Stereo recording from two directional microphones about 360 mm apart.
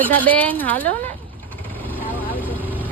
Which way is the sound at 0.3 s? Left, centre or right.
Centre.